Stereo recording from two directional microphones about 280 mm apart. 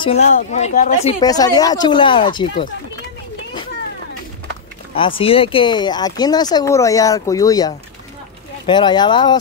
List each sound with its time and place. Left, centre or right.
0.0 s speech: left
1.2 s speech: centre
4.9 s speech: centre